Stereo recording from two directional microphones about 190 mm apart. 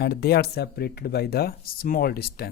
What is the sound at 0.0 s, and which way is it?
Speech, 55° left (ahead or behind).